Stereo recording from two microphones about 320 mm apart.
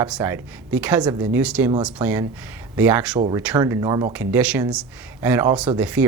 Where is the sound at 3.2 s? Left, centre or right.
Centre.